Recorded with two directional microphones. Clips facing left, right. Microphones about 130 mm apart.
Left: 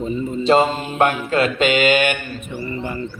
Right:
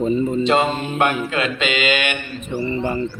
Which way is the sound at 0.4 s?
35° left (ahead or behind).